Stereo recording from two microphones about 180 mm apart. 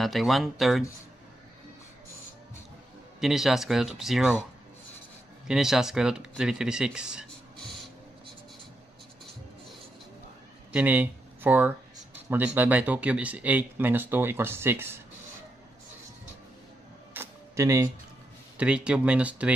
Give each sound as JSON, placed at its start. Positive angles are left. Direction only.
{"t": 0.0, "sound": "speech", "side_deg": 0}
{"t": 3.2, "sound": "speech", "side_deg": 0}
{"t": 5.5, "sound": "speech", "side_deg": -5}
{"t": 10.7, "sound": "speech", "side_deg": -10}
{"t": 17.1, "sound": "camera", "side_deg": -15}
{"t": 18.6, "sound": "speech", "side_deg": -5}